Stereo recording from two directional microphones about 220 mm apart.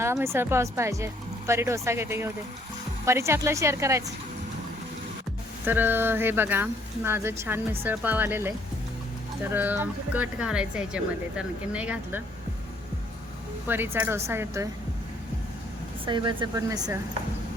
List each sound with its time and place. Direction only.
0.0 s speech: 10° right (ahead or behind)
5.6 s speech: 10° right (ahead or behind)
13.7 s speech: 10° right (ahead or behind)
16.0 s speech: 20° right (ahead or behind)